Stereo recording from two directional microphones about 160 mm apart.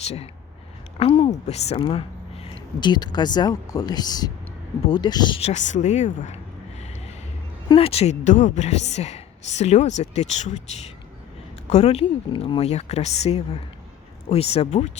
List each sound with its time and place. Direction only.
0.0 s a woman's voice: 40° left (ahead or behind)
5.4 s a sound: 45° left (ahead or behind)
7.7 s a woman's voice: 35° left (ahead or behind)
11.7 s speech: 40° left (ahead or behind)